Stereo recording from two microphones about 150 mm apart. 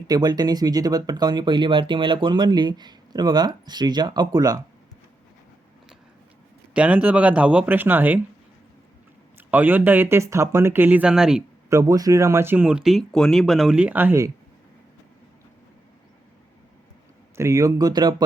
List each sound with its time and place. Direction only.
0.1 s speech: 30° right (ahead or behind)
6.7 s speech: 10° right (ahead or behind)
9.5 s speech: 10° right (ahead or behind)
11.7 s speech: 20° right (ahead or behind)
17.3 s speech: 20° right (ahead or behind)